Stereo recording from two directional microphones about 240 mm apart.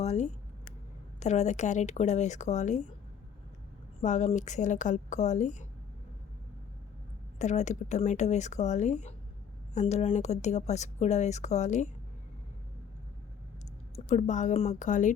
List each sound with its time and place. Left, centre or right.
0.0 s speech: left
4.0 s speech: left
7.3 s speech: left
13.9 s a woman's voice: left